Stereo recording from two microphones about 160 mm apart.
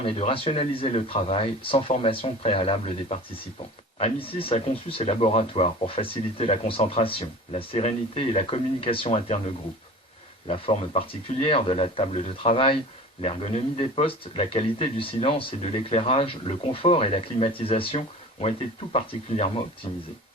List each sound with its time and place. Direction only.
0.0 s speech: 35° left (ahead or behind)
10.5 s speech: 40° left (ahead or behind)